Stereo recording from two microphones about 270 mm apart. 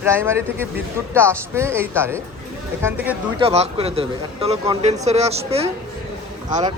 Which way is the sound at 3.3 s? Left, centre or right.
Right.